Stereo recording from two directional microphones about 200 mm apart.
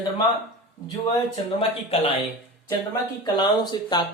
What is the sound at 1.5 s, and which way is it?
Speech, 30° left (ahead or behind).